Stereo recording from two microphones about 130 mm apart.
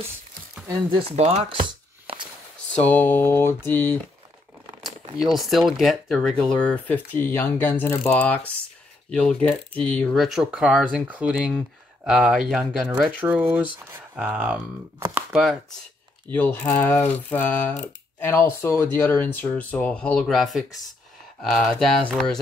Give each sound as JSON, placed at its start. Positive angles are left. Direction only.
{"t": 0.9, "sound": "speech", "side_deg": -55}
{"t": 1.5, "sound": "a sound", "side_deg": -40}
{"t": 2.8, "sound": "speech", "side_deg": 15}
{"t": 5.2, "sound": "speech", "side_deg": 0}
{"t": 15.1, "sound": "chopping", "side_deg": -5}
{"t": 16.3, "sound": "speech", "side_deg": 15}